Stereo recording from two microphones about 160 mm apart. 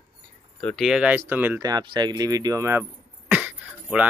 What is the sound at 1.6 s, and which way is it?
Speech, 25° right (ahead or behind).